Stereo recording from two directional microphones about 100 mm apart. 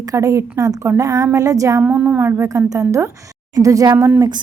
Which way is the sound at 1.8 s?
20° right (ahead or behind).